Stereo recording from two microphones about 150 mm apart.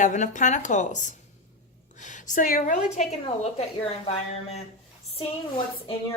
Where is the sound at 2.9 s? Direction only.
45° left (ahead or behind).